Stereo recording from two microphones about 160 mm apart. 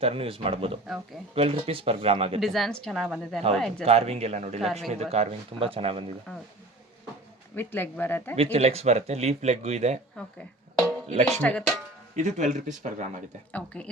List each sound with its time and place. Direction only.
0.0 s speech: 35° right (ahead or behind)
2.4 s speech: centre (ahead or behind)
3.8 s speech: 40° right (ahead or behind)
4.6 s speech: centre (ahead or behind)
5.1 s speech: 40° right (ahead or behind)
6.3 s speech: 5° left (ahead or behind)
7.5 s speech: 15° left (ahead or behind)
8.5 s speech: 40° right (ahead or behind)
11.1 s speech: 45° right (ahead or behind)
11.3 s speech: 10° left (ahead or behind)
12.1 s speech: 50° right (ahead or behind)
13.5 s speech: 10° left (ahead or behind)